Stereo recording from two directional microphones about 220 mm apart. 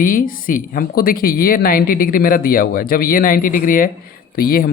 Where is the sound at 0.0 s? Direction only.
40° left (ahead or behind).